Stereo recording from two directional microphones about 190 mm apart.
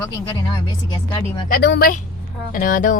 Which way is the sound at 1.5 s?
55° left (ahead or behind).